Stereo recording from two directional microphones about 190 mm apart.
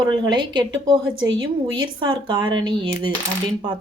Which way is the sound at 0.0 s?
20° right (ahead or behind).